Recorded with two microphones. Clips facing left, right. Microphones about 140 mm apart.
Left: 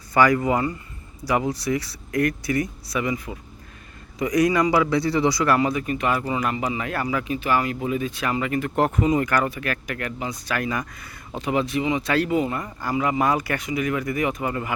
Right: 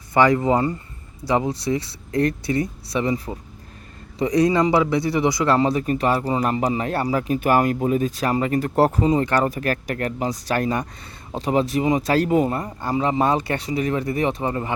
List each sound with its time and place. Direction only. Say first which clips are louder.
0.1 s speech: right 2 dB; 25° right (ahead or behind)
7.3 s speech: right 6 dB; 50° right (ahead or behind); by 14.7 s 30° right (ahead or behind)